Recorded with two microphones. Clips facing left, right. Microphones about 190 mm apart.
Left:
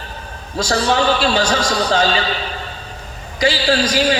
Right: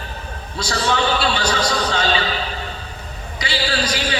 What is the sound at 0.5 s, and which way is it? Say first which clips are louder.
A man's voice: left 4 dB; 40° left (ahead or behind).